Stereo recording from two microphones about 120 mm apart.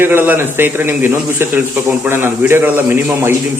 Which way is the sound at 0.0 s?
20° right (ahead or behind).